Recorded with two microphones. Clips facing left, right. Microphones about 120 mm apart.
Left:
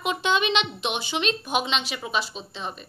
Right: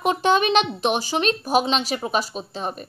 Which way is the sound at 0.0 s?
40° right (ahead or behind).